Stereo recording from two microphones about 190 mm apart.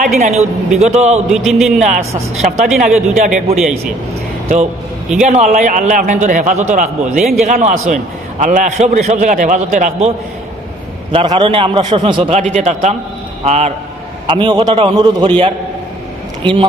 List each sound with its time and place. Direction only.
0.0 s a man's voice: 40° right (ahead or behind)
1.3 s a man's voice: centre (ahead or behind)
1.8 s a man's voice: 40° right (ahead or behind)
5.2 s a man's voice: 40° right (ahead or behind); by 15.3 s 20° right (ahead or behind)